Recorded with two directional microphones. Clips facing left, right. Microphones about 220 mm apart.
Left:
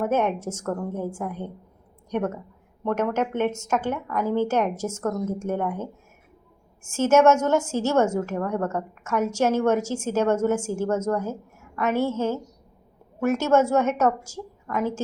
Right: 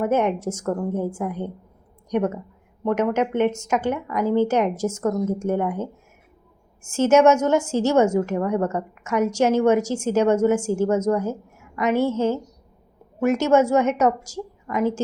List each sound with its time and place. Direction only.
0.0 s a woman's voice: 15° right (ahead or behind)
6.9 s a woman's voice: 15° right (ahead or behind)